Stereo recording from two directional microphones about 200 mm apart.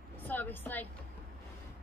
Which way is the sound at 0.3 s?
10° left (ahead or behind).